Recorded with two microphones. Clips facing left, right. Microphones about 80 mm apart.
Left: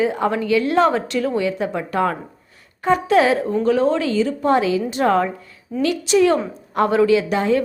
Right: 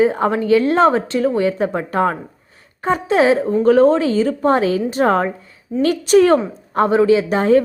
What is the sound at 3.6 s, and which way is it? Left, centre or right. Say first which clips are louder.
A woman's voice: right 7 dB; right.